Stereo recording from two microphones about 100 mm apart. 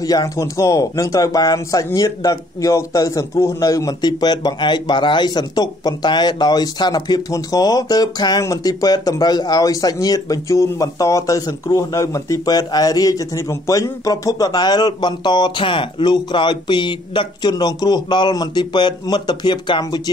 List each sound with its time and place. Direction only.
0.0 s a man's voice: 35° left (ahead or behind)